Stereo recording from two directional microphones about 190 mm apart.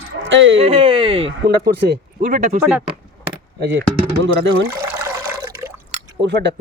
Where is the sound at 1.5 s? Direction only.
60° right (ahead or behind).